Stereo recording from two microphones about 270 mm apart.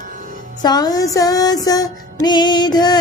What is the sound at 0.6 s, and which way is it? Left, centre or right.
Music, centre.